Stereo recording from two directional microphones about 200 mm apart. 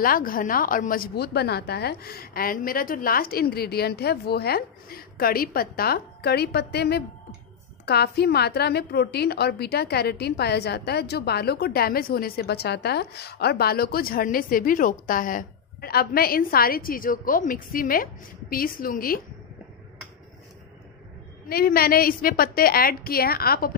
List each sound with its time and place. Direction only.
0.0 s a woman's voice: 45° left (ahead or behind)
21.5 s a woman's voice: 50° left (ahead or behind)